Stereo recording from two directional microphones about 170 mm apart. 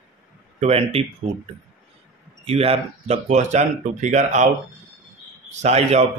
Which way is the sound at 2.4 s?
35° right (ahead or behind).